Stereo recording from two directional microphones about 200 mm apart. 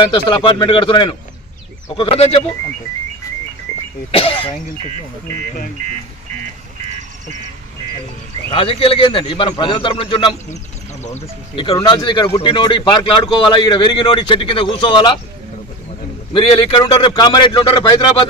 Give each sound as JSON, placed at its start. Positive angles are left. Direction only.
{"t": 0.0, "sound": "speech", "side_deg": 25}
{"t": 4.1, "sound": "speech", "side_deg": 25}
{"t": 8.5, "sound": "speech", "side_deg": 25}
{"t": 16.3, "sound": "speech", "side_deg": 20}